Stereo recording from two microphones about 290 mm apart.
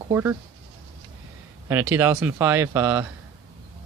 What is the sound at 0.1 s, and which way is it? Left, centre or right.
Speech, centre.